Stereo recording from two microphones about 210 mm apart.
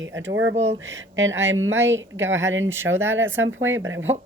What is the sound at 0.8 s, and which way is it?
Speech, 60° right (ahead or behind).